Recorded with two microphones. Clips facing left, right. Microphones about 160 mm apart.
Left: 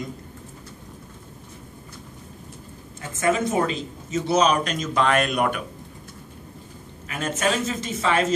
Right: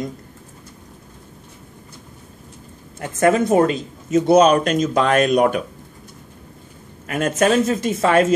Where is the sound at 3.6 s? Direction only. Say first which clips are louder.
Right 7 dB; 50° right (ahead or behind).